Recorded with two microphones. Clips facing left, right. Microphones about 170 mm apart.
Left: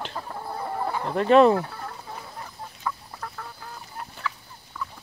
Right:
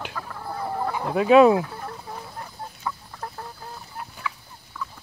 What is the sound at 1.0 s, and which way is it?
Chicken, 5° right (ahead or behind).